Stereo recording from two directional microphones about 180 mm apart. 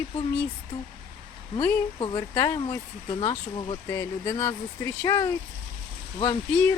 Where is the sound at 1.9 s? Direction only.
25° left (ahead or behind).